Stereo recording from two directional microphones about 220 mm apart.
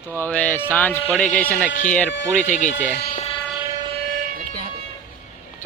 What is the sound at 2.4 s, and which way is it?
Speech, 35° left (ahead or behind).